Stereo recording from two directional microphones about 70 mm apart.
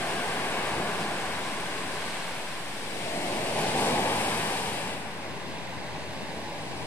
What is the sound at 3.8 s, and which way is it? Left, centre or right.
Waves, left.